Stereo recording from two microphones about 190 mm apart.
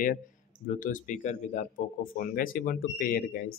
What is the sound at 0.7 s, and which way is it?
Speech, 45° left (ahead or behind).